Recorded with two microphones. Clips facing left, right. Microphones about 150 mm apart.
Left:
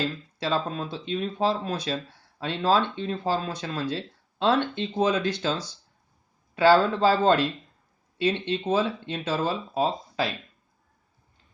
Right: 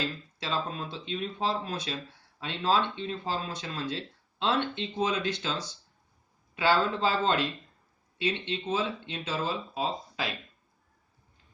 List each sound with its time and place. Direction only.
0.3 s speech: 40° left (ahead or behind)
6.6 s speech: 40° left (ahead or behind)